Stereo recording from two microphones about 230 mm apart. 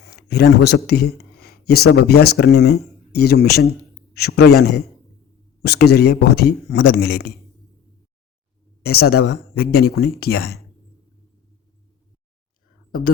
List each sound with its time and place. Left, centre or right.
0.0 s a man's voice: left
8.8 s a man's voice: left